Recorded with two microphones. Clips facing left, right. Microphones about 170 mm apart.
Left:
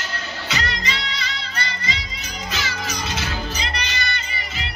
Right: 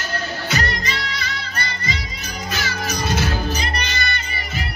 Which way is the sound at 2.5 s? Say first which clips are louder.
Right 3 dB; 50° right (ahead or behind).